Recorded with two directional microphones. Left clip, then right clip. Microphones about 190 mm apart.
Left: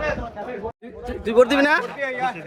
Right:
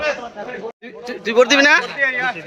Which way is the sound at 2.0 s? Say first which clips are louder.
Right 6 dB; 30° left (ahead or behind).